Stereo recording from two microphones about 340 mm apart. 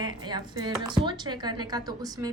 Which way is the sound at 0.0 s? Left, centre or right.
Centre.